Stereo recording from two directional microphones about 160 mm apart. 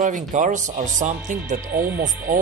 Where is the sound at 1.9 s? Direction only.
90° right.